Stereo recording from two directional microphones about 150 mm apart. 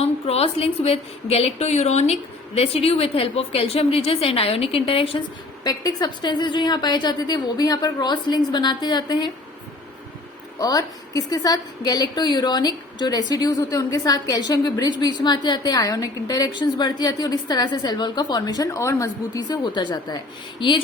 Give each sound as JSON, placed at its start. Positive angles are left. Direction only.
{"t": 0.0, "sound": "a woman's voice", "side_deg": 45}
{"t": 5.6, "sound": "a woman's voice", "side_deg": 25}
{"t": 10.6, "sound": "a woman's voice", "side_deg": 25}